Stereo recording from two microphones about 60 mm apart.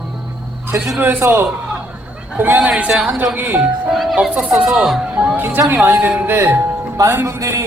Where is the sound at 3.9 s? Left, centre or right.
Centre.